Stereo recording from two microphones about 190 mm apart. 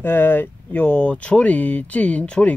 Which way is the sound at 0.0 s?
10° left (ahead or behind).